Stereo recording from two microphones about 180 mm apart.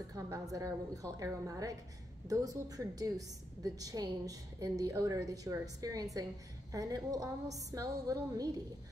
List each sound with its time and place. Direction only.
0.1 s a woman's voice: 20° right (ahead or behind)